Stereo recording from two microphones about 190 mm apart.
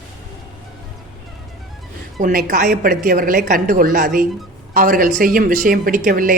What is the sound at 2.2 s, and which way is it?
Speech, 40° right (ahead or behind).